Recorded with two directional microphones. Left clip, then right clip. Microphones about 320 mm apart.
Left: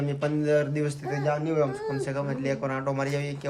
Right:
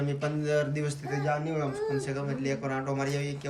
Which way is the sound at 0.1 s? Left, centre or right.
Centre.